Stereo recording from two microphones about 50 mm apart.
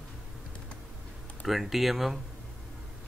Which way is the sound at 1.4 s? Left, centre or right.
Centre.